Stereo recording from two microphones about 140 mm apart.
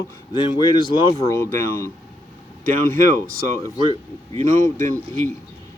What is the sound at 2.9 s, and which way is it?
Speech, 25° left (ahead or behind).